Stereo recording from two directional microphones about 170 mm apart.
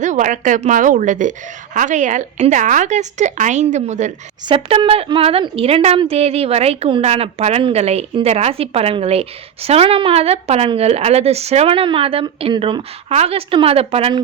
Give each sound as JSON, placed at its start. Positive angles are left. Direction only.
{"t": 0.0, "sound": "a woman's voice", "side_deg": -45}
{"t": 4.4, "sound": "a woman's voice", "side_deg": -30}